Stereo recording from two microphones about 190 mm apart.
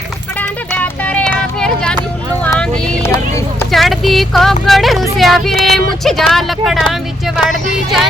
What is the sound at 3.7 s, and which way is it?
Music, centre (ahead or behind).